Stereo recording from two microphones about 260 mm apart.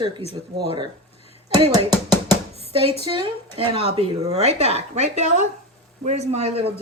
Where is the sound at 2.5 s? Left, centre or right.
Left.